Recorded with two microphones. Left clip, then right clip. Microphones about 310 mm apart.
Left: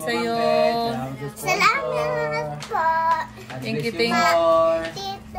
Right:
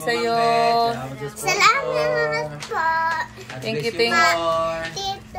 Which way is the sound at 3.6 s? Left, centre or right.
Centre.